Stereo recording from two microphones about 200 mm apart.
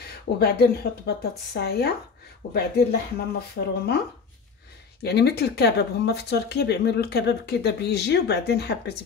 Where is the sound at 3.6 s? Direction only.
55° left (ahead or behind).